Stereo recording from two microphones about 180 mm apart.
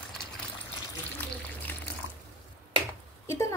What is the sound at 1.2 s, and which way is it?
Water, 10° left (ahead or behind).